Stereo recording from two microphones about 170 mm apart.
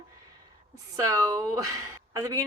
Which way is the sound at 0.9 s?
20° right (ahead or behind).